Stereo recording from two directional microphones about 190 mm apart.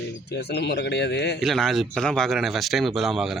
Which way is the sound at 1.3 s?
Centre (ahead or behind).